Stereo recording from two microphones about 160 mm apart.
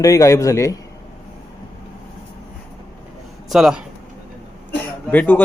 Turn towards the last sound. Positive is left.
turn(degrees=10)  # may be behind; listen again after turning